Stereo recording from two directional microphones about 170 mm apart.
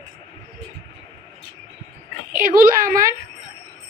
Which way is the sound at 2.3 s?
55° right (ahead or behind).